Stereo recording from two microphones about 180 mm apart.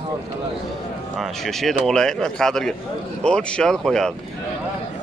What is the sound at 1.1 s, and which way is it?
Speech, centre (ahead or behind).